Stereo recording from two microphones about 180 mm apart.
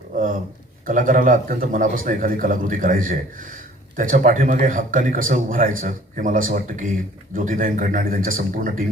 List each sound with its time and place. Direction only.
0.9 s a man's voice: 50° right (ahead or behind)